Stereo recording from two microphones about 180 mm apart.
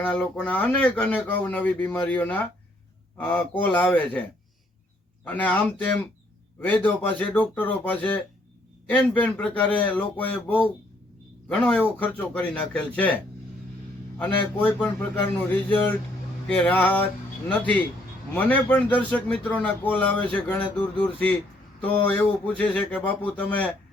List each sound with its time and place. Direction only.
0.0 s speech: 5° left (ahead or behind)